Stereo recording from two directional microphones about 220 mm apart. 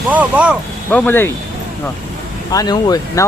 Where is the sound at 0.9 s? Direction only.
10° left (ahead or behind).